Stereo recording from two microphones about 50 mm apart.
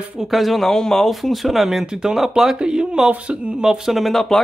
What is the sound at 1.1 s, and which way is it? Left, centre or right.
Speech, centre.